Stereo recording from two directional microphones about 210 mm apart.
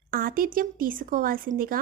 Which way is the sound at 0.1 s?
45° right (ahead or behind).